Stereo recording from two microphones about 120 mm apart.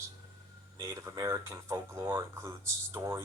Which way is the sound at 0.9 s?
25° right (ahead or behind).